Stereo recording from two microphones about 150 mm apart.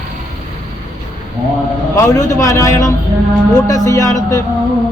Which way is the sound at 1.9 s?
20° left (ahead or behind).